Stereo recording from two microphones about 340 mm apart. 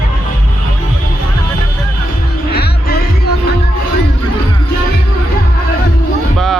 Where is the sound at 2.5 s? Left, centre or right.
Left.